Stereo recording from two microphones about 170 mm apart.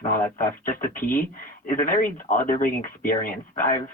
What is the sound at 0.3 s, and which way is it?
Speech, 55° left (ahead or behind).